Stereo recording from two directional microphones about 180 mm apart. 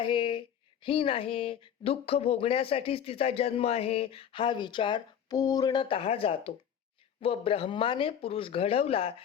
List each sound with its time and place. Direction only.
0.0 s speech: 30° left (ahead or behind)